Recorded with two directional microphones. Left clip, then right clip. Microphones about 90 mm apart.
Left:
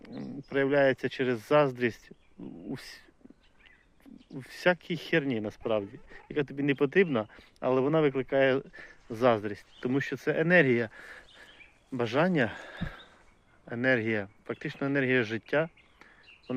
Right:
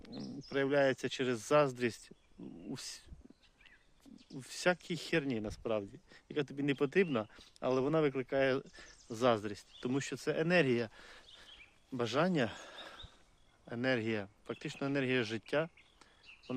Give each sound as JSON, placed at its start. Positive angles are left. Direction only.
{"t": 0.0, "sound": "speech", "side_deg": -25}
{"t": 4.3, "sound": "speech", "side_deg": -25}
{"t": 8.6, "sound": "a man's voice", "side_deg": -30}